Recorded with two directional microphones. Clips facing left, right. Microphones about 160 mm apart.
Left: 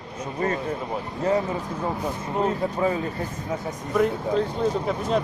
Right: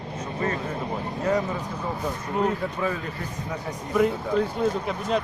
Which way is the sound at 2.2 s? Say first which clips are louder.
Left 1 dB; 25° left (ahead or behind).